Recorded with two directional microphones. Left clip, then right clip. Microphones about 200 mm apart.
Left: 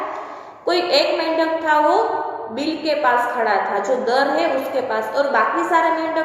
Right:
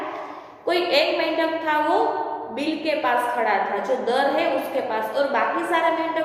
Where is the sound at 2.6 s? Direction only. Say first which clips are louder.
Left 5 dB; 20° left (ahead or behind).